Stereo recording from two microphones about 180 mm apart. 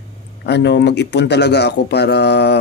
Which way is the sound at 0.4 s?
70° left (ahead or behind).